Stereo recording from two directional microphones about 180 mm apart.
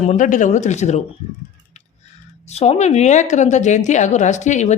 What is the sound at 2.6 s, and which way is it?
A woman's voice, 35° left (ahead or behind).